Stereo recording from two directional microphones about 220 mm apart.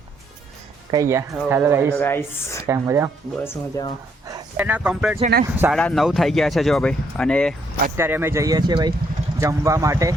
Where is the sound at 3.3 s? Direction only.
10° left (ahead or behind).